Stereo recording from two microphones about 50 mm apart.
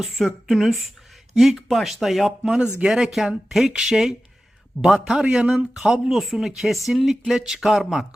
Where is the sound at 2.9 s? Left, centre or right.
Centre.